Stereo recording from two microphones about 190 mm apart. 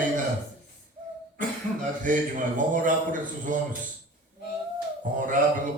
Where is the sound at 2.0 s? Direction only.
45° right (ahead or behind).